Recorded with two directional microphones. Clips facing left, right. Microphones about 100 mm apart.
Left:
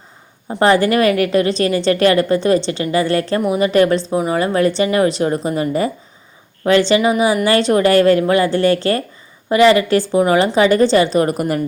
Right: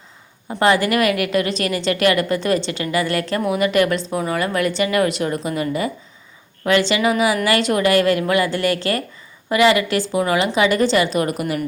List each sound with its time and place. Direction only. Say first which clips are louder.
0.6 s a woman's voice: left 4 dB; 30° left (ahead or behind)